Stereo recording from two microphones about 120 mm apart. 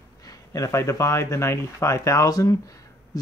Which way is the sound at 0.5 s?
25° left (ahead or behind).